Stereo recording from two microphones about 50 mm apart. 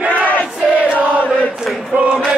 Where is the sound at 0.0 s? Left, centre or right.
Right.